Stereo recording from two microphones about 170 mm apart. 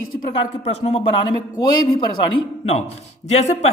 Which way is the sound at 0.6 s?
40° left (ahead or behind).